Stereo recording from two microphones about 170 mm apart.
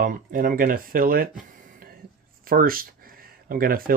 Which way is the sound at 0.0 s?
55° right (ahead or behind).